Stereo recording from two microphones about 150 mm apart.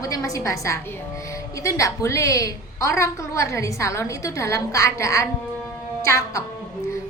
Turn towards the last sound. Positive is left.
turn(degrees=20)  # may be behind; listen again after turning